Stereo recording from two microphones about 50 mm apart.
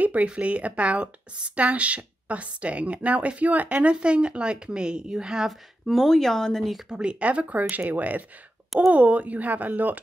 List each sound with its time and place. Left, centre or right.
0.0 s speech: right; by 5.5 s centre
5.9 s speech: centre
6.9 s speech: right